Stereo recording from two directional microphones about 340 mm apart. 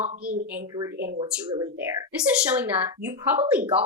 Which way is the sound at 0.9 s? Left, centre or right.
Right.